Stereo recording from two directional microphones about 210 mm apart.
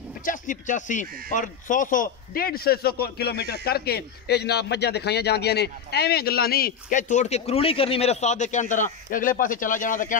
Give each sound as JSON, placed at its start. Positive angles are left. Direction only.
{"t": 0.2, "sound": "a man's voice", "side_deg": 40}